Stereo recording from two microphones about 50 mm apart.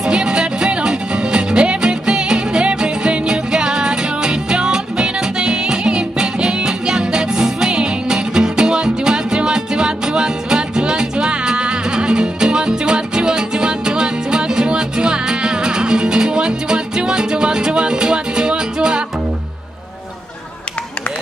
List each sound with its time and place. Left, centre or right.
0.0 s music: centre